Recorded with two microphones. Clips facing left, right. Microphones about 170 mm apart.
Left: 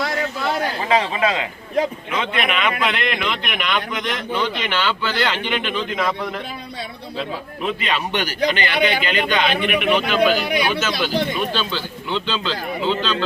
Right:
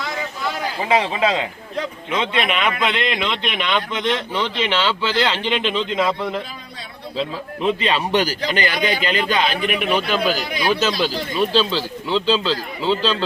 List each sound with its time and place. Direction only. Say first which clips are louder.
0.0 s a sound: left 4 dB; 70° left (ahead or behind)
0.9 s speech: right 2 dB; 15° right (ahead or behind)
7.2 s speech: right 3 dB; 30° right (ahead or behind)